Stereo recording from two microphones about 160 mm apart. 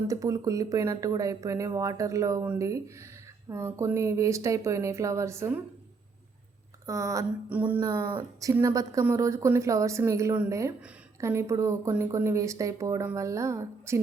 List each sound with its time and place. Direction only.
0.1 s speech: 20° right (ahead or behind)
6.8 s speech: 20° right (ahead or behind)
7.8 s speech: 20° right (ahead or behind)